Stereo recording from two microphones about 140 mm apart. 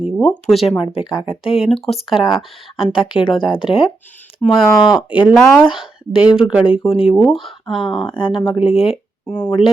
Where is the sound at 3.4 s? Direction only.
35° left (ahead or behind).